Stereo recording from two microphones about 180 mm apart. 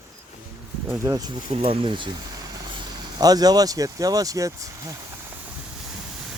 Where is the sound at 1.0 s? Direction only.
20° right (ahead or behind).